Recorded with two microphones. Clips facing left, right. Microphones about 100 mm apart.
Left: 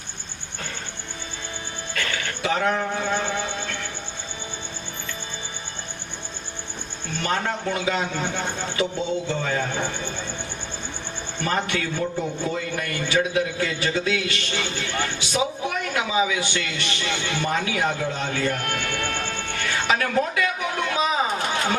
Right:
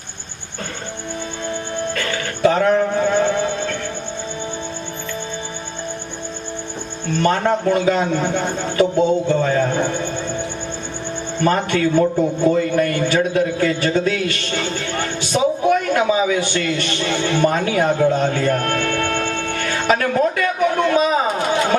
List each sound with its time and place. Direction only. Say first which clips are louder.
2.4 s music: right 9 dB; 45° right (ahead or behind)
7.2 s a man's voice: right 9 dB; 45° right (ahead or behind)
11.4 s a man's voice: right 8 dB; 45° right (ahead or behind)